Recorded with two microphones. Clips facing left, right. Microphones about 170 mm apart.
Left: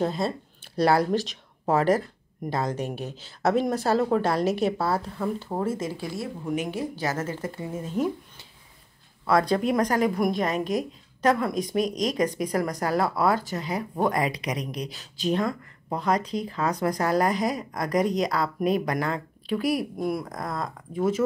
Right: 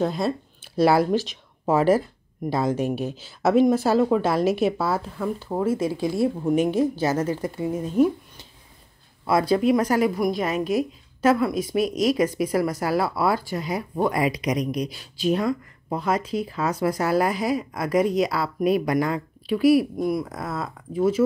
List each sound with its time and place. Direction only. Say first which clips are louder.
0.0 s a woman's voice: right 2 dB; 5° right (ahead or behind)
6.5 s a woman's voice: right 5 dB; 25° right (ahead or behind); by 21.1 s 5° right (ahead or behind)